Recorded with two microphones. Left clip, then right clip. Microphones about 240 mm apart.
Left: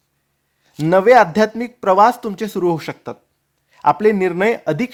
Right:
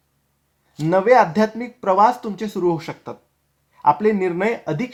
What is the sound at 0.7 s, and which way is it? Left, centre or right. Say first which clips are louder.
Speech: left 4 dB; left.